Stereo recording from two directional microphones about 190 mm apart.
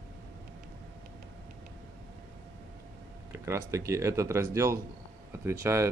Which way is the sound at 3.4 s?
15° right (ahead or behind).